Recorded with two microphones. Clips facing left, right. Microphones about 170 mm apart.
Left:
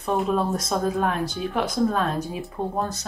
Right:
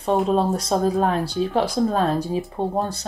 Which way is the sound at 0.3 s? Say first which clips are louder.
Right 4 dB; 30° right (ahead or behind).